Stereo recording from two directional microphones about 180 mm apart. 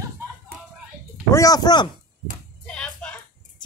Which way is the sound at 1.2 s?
20° left (ahead or behind).